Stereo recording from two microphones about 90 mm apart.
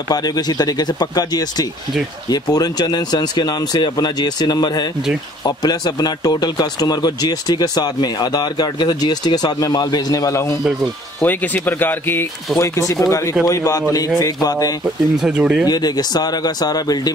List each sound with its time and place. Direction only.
0.1 s speech: 50° left (ahead or behind)
11.2 s speech: 20° left (ahead or behind)
12.5 s speech: 35° left (ahead or behind)
15.1 s speech: 5° right (ahead or behind)
15.6 s speech: 50° left (ahead or behind)